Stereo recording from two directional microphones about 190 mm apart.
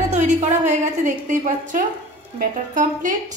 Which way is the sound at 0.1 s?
40° right (ahead or behind).